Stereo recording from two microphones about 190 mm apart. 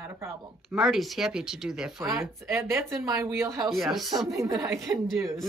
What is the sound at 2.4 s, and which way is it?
Speech, 15° right (ahead or behind).